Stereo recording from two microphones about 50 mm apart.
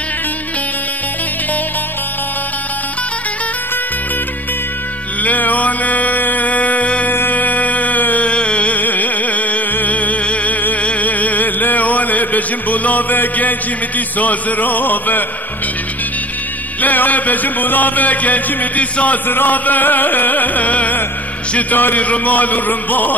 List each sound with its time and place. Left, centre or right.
5.2 s music: left
16.8 s music: left
19.2 s music: left